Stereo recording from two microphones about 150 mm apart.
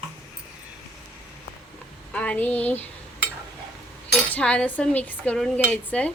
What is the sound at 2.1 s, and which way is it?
Speech, 10° left (ahead or behind).